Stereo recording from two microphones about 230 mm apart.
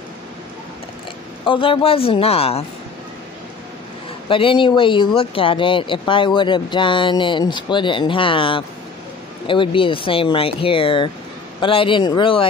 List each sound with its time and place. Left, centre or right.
1.4 s speech: left
4.3 s speech: left